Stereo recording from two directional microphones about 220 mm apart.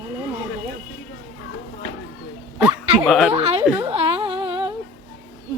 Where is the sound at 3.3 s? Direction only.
25° right (ahead or behind).